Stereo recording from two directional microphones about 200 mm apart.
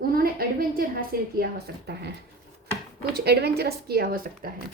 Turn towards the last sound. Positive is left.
turn(degrees=-45)  # may be behind; listen again after turning